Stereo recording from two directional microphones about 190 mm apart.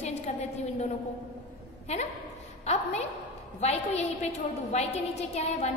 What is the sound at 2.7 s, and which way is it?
A woman's voice, 35° left (ahead or behind).